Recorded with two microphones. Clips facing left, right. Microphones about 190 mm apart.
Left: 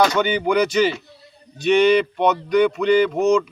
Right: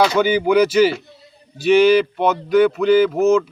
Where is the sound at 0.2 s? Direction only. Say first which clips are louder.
Right 4 dB; 5° right (ahead or behind).